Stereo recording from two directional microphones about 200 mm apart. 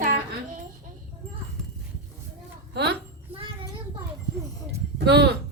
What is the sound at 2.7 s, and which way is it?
Speech, 55° right (ahead or behind).